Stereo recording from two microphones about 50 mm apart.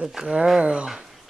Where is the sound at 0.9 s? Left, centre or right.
Centre.